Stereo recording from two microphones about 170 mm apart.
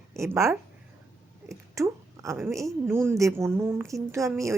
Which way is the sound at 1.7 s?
15° right (ahead or behind).